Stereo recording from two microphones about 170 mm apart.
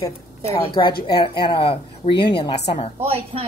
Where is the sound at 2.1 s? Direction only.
80° left.